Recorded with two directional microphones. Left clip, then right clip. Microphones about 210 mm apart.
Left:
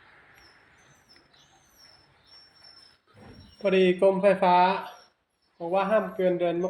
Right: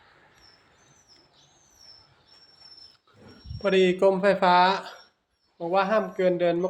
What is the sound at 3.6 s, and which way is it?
Speech, 5° right (ahead or behind).